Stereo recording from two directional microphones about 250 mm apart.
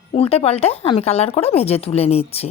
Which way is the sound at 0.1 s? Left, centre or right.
Left.